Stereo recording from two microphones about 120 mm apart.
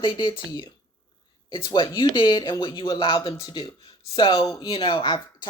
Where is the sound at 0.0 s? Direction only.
35° left (ahead or behind).